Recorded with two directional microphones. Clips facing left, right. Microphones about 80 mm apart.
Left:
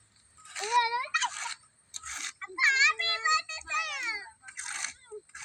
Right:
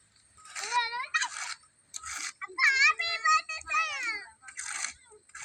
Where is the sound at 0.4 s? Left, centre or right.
Centre.